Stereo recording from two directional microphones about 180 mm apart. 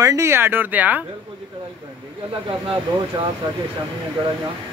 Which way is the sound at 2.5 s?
30° right (ahead or behind).